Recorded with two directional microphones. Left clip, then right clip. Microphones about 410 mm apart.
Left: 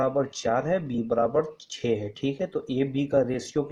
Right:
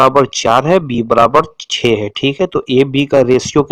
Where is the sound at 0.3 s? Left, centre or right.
Right.